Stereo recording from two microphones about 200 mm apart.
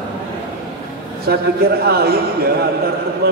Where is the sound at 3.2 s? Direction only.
50° right (ahead or behind).